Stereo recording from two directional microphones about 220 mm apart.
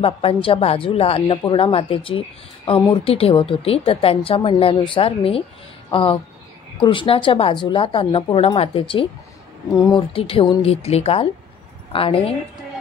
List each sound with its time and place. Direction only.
0.0 s speech: 25° left (ahead or behind)